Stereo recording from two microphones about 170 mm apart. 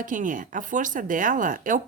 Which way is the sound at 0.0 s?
50° right (ahead or behind).